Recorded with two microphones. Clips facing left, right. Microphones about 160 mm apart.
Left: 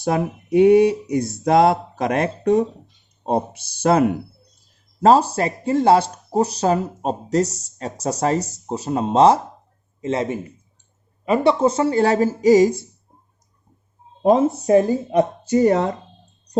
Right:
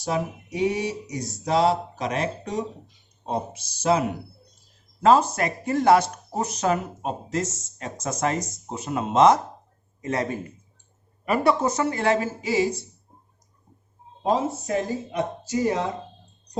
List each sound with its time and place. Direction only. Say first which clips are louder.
0.0 s speech: left 5 dB; 55° left (ahead or behind)
5.0 s speech: left 4 dB; 35° left (ahead or behind)
14.2 s speech: left 8 dB; 55° left (ahead or behind)